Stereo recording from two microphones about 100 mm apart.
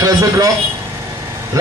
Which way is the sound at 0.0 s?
35° right (ahead or behind).